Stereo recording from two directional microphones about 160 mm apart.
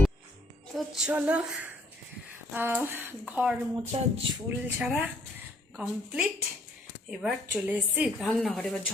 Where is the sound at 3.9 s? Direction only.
40° right (ahead or behind).